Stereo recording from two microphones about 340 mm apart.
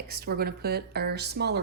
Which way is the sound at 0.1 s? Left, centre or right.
Right.